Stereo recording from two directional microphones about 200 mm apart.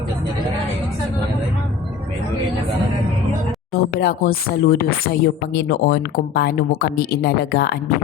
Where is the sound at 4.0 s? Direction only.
50° left (ahead or behind).